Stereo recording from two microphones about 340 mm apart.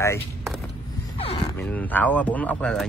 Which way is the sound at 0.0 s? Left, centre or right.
Centre.